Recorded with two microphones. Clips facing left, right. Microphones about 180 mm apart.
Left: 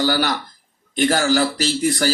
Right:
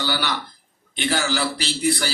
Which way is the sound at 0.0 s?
45° left (ahead or behind).